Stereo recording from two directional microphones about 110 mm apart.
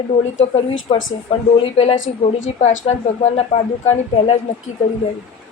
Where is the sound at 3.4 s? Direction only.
75° left (ahead or behind).